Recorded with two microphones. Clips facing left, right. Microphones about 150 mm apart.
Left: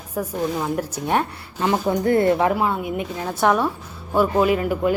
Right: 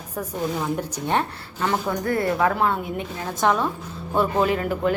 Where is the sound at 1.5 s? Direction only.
25° left (ahead or behind).